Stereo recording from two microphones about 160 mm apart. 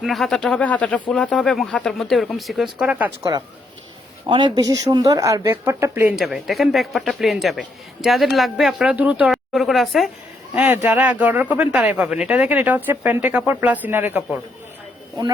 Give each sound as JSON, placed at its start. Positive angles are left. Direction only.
{"t": 0.0, "sound": "speech", "side_deg": 0}
{"t": 4.3, "sound": "speech", "side_deg": -30}
{"t": 6.1, "sound": "speech", "side_deg": 0}
{"t": 10.5, "sound": "speech", "side_deg": -10}